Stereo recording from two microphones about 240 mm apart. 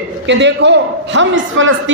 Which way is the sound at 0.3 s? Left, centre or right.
Right.